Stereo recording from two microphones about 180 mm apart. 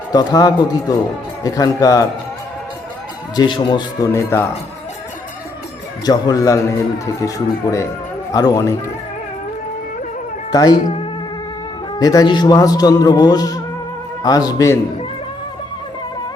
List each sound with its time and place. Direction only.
0.1 s a man's voice: 20° left (ahead or behind)
3.3 s a man's voice: 25° left (ahead or behind)
6.1 s a man's voice: 20° left (ahead or behind)
10.5 s a man's voice: 20° left (ahead or behind)
11.9 s a man's voice: 20° left (ahead or behind)